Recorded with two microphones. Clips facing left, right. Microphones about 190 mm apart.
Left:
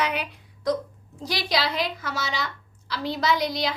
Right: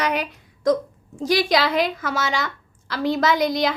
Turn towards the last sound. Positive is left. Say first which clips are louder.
# right 5 dB
turn(degrees=-50)  # may be behind; listen again after turning